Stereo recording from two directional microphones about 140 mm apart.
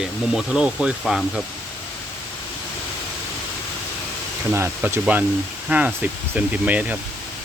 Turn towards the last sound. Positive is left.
turn(degrees=-10)  # may be behind; listen again after turning